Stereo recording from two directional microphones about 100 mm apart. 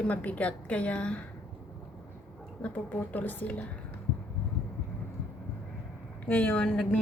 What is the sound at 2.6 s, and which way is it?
A woman's voice, 15° left (ahead or behind).